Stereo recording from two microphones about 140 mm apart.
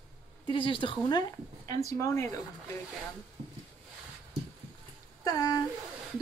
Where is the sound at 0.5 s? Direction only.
35° left (ahead or behind).